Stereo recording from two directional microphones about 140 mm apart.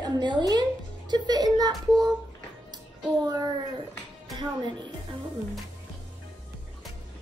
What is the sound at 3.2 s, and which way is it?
Speech, 30° right (ahead or behind).